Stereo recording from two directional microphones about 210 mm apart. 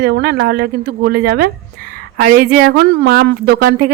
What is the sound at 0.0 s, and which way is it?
Speech, 50° right (ahead or behind).